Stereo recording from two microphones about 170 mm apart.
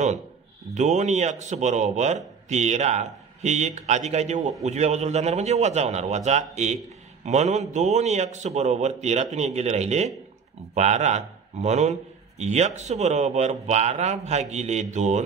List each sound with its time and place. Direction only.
0.7 s a man's voice: 45° right (ahead or behind)